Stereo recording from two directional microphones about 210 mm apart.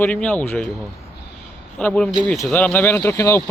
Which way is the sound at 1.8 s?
5° left (ahead or behind).